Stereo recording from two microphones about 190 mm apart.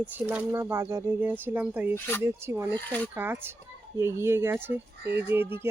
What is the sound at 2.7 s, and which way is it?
Speech, 10° left (ahead or behind).